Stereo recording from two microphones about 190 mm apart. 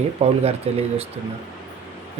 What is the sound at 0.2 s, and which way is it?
Speech, 35° right (ahead or behind).